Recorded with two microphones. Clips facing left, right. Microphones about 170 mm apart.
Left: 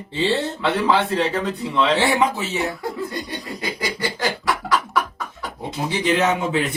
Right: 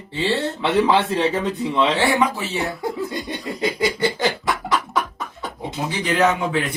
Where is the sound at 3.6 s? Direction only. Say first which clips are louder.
Right 7 dB; 25° right (ahead or behind).